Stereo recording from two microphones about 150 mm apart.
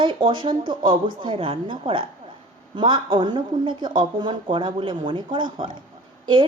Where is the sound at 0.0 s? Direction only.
35° right (ahead or behind).